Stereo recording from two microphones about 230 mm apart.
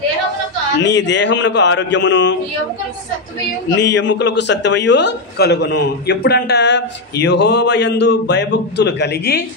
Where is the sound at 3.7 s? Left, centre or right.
Left.